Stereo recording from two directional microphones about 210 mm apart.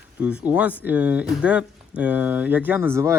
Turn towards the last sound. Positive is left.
turn(degrees=-10)  # may be behind; listen again after turning